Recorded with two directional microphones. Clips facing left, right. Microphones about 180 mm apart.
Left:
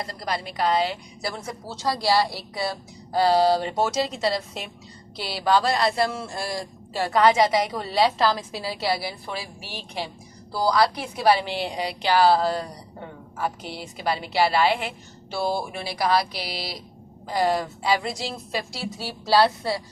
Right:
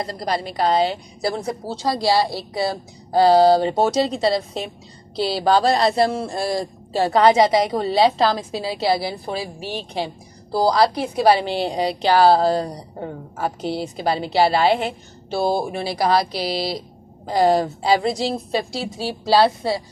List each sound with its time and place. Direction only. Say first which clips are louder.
0.0 s a woman's voice: right 6 dB; 40° right (ahead or behind)